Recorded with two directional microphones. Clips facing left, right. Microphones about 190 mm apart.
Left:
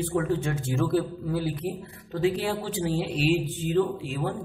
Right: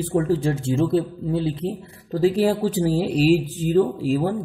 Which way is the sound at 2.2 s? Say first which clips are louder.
Right 7 dB; 40° right (ahead or behind).